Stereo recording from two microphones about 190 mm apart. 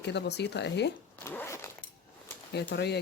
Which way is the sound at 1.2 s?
10° left (ahead or behind).